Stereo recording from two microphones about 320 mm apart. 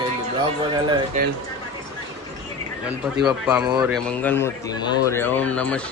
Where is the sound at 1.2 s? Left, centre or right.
Right.